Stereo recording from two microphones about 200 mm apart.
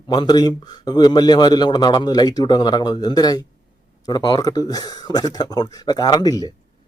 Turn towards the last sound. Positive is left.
turn(degrees=15)  # may be behind; listen again after turning